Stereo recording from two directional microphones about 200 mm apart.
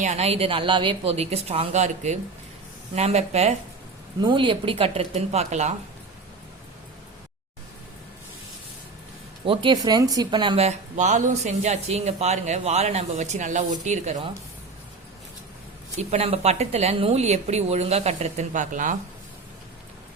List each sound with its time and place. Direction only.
0.0 s a woman's voice: 35° right (ahead or behind)
9.4 s speech: 25° right (ahead or behind)
16.0 s speech: 30° right (ahead or behind)